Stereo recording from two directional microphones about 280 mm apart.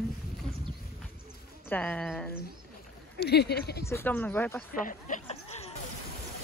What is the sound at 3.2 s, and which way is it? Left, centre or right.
Speech, left.